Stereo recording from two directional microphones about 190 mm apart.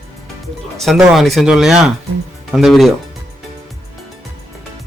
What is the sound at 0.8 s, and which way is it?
A man's voice, centre (ahead or behind).